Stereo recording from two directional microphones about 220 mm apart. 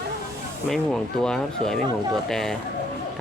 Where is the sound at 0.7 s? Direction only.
5° left (ahead or behind).